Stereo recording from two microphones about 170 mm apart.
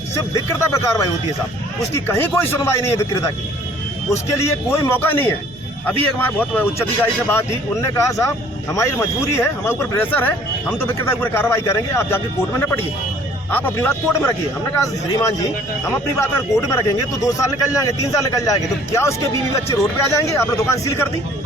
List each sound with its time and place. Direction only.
0.3 s a man's voice: 20° left (ahead or behind)
19.7 s speech: 20° left (ahead or behind)